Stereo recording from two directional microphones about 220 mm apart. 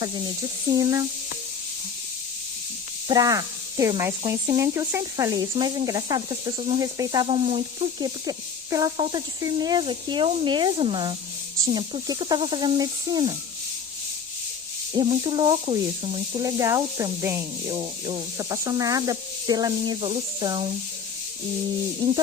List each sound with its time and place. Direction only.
0.7 s speech: 15° right (ahead or behind)
3.1 s speech: 15° right (ahead or behind)
14.9 s speech: 25° right (ahead or behind)